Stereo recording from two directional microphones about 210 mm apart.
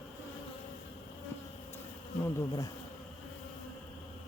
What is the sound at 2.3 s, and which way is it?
Speech, 15° left (ahead or behind).